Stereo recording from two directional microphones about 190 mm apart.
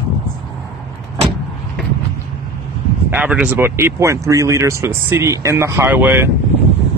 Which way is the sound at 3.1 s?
10° right (ahead or behind).